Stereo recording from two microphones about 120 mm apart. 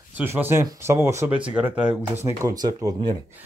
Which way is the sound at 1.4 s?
10° right (ahead or behind).